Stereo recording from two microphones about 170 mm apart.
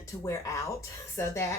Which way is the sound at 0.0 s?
20° left (ahead or behind).